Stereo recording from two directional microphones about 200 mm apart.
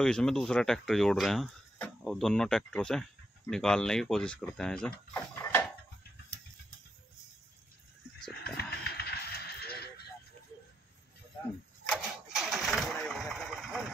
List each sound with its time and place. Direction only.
0.0 s speech: 5° left (ahead or behind)
5.1 s a sound: 10° left (ahead or behind)
8.5 s music: 55° left (ahead or behind)
11.9 s engine starting: centre (ahead or behind)